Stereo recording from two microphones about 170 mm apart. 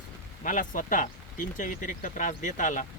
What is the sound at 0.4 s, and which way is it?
Speech, 50° left (ahead or behind).